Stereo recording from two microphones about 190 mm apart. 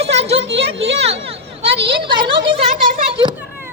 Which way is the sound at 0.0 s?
30° right (ahead or behind).